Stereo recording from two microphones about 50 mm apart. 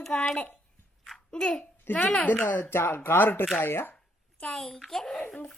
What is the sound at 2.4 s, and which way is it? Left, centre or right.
Speech, left.